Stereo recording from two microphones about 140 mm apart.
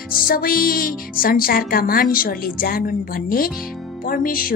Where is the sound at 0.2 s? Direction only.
90° left.